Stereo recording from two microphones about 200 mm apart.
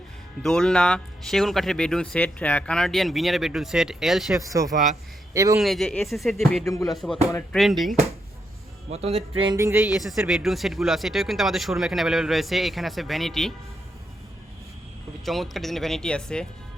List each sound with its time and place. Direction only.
0.4 s speech: 5° left (ahead or behind)
4.4 s speech: 15° right (ahead or behind)
5.5 s speech: centre (ahead or behind)
8.9 s speech: 30° right (ahead or behind)
9.4 s speech: 20° right (ahead or behind); by 13.5 s centre (ahead or behind)
15.2 s speech: centre (ahead or behind)